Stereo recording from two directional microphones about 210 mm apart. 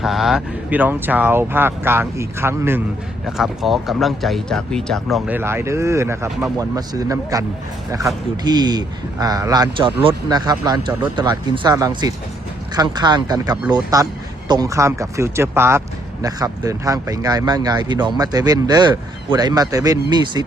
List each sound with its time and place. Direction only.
0.0 s speech: centre (ahead or behind); by 7.4 s 15° right (ahead or behind)
8.4 s speech: 20° right (ahead or behind)